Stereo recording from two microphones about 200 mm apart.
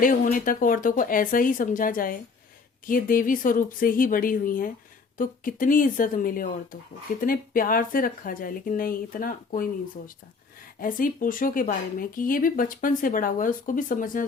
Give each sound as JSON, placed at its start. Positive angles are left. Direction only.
{"t": 0.0, "sound": "speech", "side_deg": 45}
{"t": 10.8, "sound": "speech", "side_deg": 45}